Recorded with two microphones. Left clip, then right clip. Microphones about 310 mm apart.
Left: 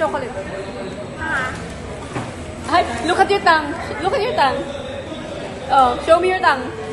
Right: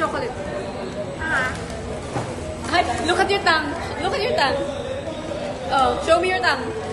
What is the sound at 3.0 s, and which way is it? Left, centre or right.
A woman's voice, centre.